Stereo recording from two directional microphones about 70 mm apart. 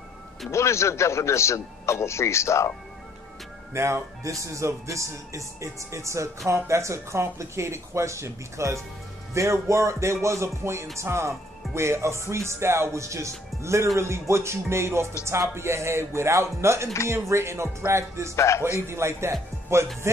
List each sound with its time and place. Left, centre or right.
0.5 s a man's voice: left
3.7 s a man's voice: right
18.3 s a man's voice: left
18.9 s speech: right